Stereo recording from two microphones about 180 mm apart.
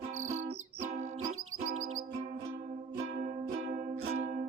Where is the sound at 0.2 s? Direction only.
45° right (ahead or behind).